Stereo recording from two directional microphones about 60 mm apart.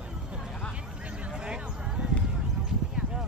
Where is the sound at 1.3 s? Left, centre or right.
Centre.